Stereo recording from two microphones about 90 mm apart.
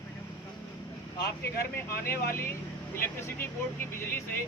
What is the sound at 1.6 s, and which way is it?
Speech, 30° left (ahead or behind).